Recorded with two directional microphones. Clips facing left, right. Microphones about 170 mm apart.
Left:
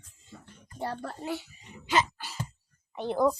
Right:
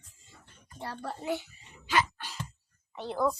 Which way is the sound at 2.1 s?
5° left (ahead or behind).